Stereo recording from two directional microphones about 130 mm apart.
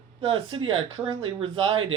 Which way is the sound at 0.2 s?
45° right (ahead or behind).